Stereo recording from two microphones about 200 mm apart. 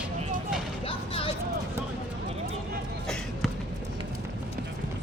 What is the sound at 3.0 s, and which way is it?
Basketball bounce, 5° left (ahead or behind).